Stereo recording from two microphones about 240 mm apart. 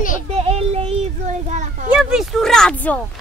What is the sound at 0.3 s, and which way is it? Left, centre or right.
Child singing, right.